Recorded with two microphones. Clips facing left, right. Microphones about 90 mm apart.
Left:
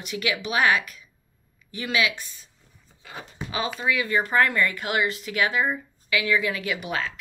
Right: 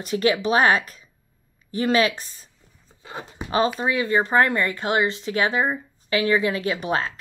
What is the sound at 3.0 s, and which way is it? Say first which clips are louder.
A woman's voice: right 3 dB; 25° right (ahead or behind).